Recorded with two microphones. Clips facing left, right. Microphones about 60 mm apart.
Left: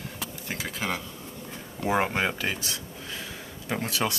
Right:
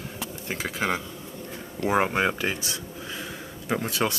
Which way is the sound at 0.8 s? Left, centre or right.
Centre.